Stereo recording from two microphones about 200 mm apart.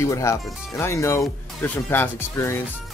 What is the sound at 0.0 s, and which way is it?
Speech, 15° left (ahead or behind).